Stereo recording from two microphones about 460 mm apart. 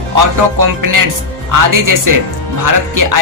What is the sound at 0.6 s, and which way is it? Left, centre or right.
Speech, right.